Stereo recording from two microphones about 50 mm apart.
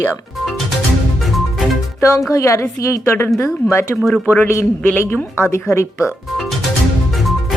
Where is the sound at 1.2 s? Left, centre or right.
Centre.